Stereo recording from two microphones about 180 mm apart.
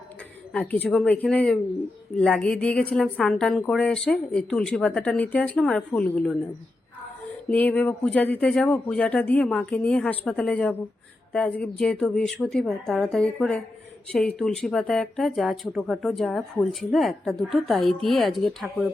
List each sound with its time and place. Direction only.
0.5 s speech: 10° left (ahead or behind)
7.5 s speech: 10° left (ahead or behind)